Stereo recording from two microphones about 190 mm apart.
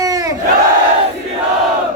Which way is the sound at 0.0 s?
20° right (ahead or behind).